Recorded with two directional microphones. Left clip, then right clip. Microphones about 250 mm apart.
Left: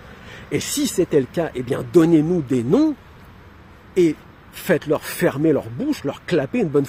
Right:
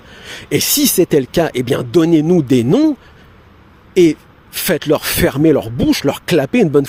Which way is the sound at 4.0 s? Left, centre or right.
Right.